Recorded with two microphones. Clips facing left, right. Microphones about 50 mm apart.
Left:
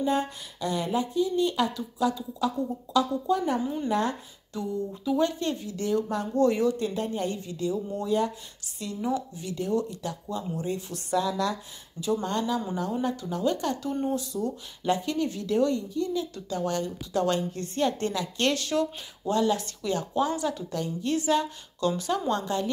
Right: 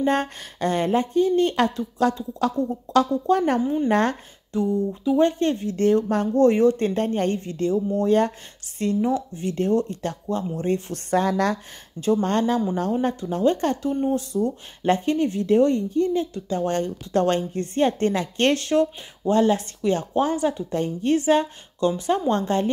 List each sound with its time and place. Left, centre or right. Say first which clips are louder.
0.0 s speech: right 4 dB; right
4.5 s a woman's voice: right 8 dB; right
8.7 s a woman's voice: right 7 dB; right